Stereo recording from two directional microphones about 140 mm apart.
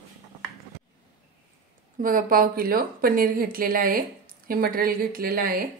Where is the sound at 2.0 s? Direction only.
85° right.